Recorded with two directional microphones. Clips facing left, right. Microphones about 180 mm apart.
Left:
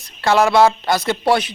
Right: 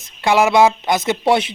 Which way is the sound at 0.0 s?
15° right (ahead or behind).